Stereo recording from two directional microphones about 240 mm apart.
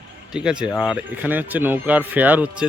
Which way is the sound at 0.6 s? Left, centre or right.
Centre.